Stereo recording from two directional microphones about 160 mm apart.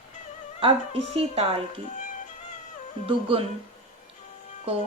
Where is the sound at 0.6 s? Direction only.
35° right (ahead or behind).